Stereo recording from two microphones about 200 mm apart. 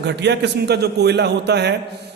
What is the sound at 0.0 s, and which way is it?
A man's voice, 60° right (ahead or behind).